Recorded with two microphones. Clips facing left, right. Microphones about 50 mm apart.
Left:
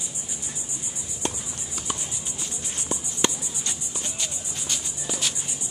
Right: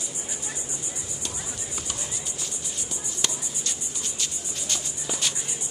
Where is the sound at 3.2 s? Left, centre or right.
Centre.